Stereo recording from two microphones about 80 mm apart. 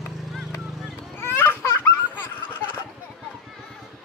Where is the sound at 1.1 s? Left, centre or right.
Left.